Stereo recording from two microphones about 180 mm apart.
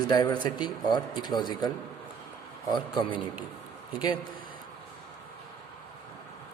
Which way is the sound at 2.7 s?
25° left (ahead or behind).